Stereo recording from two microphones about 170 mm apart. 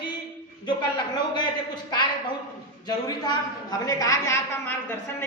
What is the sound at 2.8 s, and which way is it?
A woman's voice, 25° left (ahead or behind).